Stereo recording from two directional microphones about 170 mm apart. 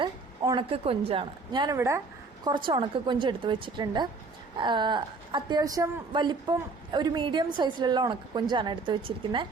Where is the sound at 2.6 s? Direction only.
30° right (ahead or behind).